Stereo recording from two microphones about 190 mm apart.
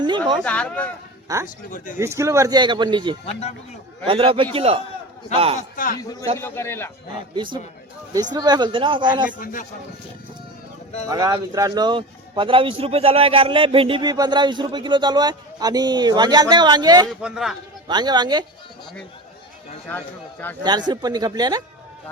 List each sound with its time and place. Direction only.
0.4 s a man's voice: 5° left (ahead or behind)
1.3 s speech: 20° right (ahead or behind)
1.7 s a man's voice: 40° left (ahead or behind)
2.0 s a man's voice: 15° right (ahead or behind)
5.5 s a man's voice: 45° left (ahead or behind)
6.0 s a man's voice: 20° left (ahead or behind)
8.1 s speech: 20° right (ahead or behind)
9.4 s a man's voice: 45° left (ahead or behind)
11.0 s speech: 20° right (ahead or behind)
17.1 s speech: centre (ahead or behind)
17.8 s speech: 20° right (ahead or behind)
20.7 s speech: 20° right (ahead or behind)